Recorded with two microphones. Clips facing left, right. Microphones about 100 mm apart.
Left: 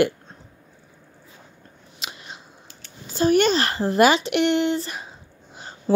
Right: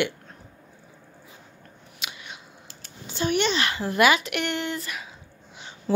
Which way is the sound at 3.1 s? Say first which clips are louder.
Left 6 dB; 40° left (ahead or behind).